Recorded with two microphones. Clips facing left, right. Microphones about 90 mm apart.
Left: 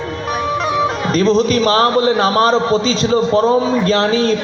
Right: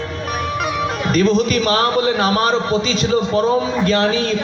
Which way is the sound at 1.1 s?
30° left (ahead or behind).